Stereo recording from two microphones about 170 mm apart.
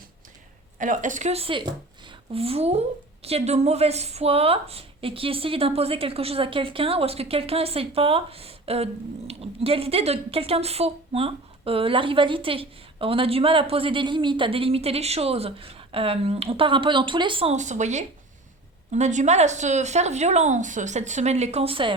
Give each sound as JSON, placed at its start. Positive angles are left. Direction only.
{"t": 0.8, "sound": "a woman's voice", "side_deg": -50}